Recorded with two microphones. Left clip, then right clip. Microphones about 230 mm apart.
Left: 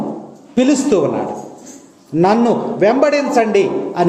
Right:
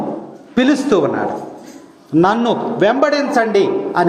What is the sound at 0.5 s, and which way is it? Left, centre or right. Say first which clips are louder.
Speech: even; centre.